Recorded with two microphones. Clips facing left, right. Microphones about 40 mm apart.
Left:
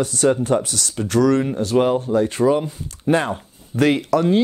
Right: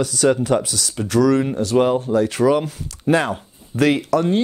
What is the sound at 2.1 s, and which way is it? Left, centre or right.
Speech, right.